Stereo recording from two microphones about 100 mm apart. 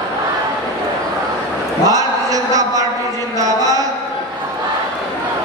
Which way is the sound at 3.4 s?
35° right (ahead or behind).